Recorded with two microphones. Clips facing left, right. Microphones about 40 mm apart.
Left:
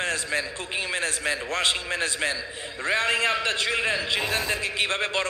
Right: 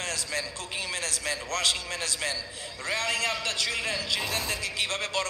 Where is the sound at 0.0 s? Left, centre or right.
Left.